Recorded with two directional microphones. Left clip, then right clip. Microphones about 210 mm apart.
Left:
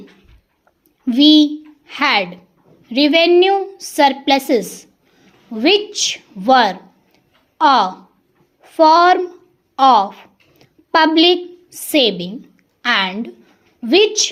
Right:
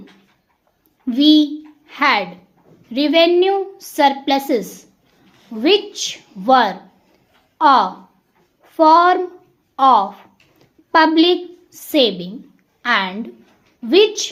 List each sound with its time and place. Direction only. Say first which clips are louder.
1.0 s a child's voice: left 2 dB; 20° left (ahead or behind)